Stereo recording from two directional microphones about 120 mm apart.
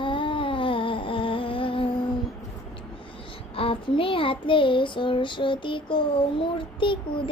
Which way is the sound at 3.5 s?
50° left (ahead or behind).